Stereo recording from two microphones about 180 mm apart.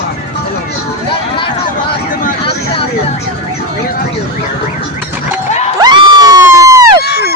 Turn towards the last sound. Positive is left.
turn(degrees=60)  # may be behind; listen again after turning